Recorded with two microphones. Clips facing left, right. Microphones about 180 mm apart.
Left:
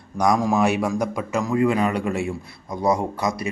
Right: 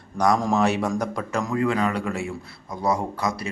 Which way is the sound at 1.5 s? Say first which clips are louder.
Left 3 dB; 15° left (ahead or behind).